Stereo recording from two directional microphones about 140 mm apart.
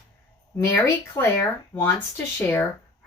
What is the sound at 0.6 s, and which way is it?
Speech, 15° left (ahead or behind).